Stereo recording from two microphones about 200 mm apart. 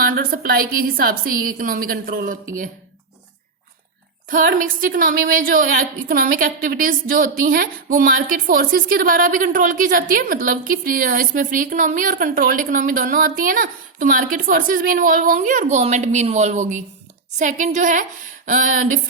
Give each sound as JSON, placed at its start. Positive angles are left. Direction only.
{"t": 0.0, "sound": "a woman's voice", "side_deg": -45}
{"t": 4.3, "sound": "a woman's voice", "side_deg": -45}